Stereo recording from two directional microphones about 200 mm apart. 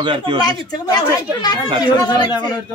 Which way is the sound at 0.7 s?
20° left (ahead or behind).